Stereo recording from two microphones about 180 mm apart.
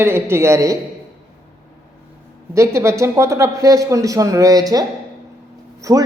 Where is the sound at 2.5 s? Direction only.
15° right (ahead or behind).